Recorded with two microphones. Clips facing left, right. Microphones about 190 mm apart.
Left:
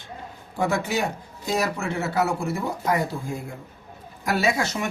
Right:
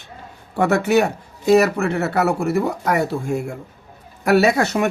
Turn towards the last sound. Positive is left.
turn(degrees=-60)  # may be behind; listen again after turning